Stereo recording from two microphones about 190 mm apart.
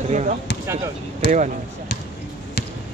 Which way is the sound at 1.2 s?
65° left (ahead or behind).